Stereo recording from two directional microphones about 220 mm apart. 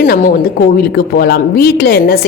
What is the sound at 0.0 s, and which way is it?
A woman's voice, 35° left (ahead or behind).